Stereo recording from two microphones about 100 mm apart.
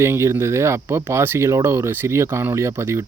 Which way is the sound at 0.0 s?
25° right (ahead or behind).